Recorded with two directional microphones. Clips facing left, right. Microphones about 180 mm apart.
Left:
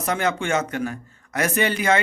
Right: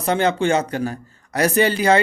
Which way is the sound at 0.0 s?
30° right (ahead or behind).